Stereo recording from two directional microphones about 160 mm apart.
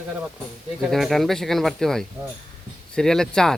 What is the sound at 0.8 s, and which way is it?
Speech, centre (ahead or behind).